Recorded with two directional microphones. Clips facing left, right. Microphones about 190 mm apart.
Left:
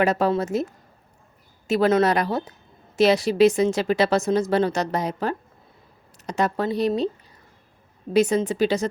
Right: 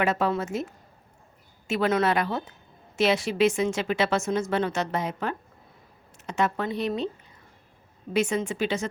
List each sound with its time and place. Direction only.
0.0 s speech: 35° left (ahead or behind)
8.1 s speech: 35° left (ahead or behind)